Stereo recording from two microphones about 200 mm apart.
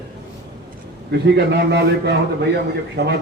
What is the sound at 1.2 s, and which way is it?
A man's voice, 60° right (ahead or behind).